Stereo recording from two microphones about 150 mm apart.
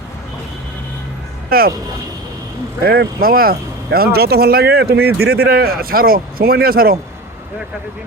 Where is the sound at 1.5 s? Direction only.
80° right.